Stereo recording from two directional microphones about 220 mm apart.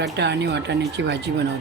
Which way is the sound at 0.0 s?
50° right (ahead or behind).